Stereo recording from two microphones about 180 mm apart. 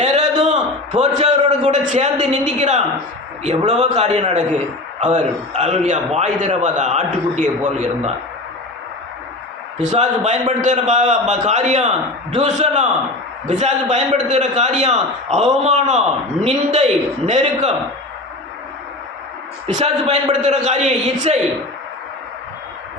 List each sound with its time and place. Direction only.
0.0 s a sound: 40° right (ahead or behind)
1.0 s a man's voice: 40° right (ahead or behind)
9.9 s a man's voice: 40° right (ahead or behind)
19.6 s a man's voice: 40° right (ahead or behind)